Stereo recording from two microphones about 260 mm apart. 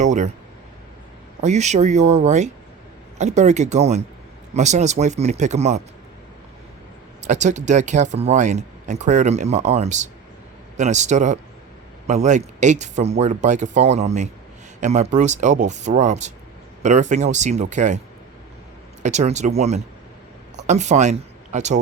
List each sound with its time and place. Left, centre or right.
0.0 s speech: right
1.4 s speech: right
7.2 s speech: right
19.0 s speech: right